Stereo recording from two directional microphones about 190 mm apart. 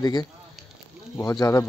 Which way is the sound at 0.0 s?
20° left (ahead or behind).